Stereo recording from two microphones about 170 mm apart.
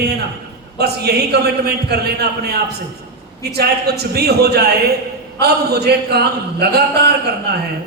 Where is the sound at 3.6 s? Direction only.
70° right (ahead or behind).